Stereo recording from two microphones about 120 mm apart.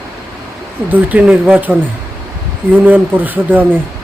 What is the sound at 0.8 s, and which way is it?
A man's voice, 10° right (ahead or behind).